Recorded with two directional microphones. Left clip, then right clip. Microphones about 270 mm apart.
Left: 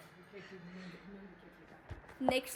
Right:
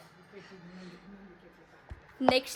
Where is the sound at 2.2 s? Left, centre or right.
Right.